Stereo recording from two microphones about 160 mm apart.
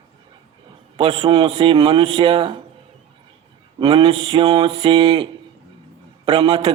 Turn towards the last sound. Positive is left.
turn(degrees=-35)  # may be behind; listen again after turning